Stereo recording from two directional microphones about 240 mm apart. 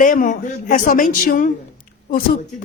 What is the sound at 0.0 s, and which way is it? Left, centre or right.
Speech, left.